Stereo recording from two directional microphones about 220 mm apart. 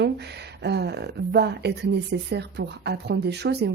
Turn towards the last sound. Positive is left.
turn(degrees=-50)  # may be behind; listen again after turning